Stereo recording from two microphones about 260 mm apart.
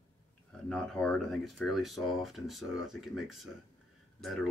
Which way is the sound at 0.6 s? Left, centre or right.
Centre.